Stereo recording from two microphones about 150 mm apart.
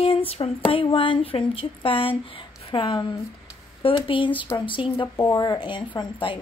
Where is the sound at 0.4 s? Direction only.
30° left (ahead or behind).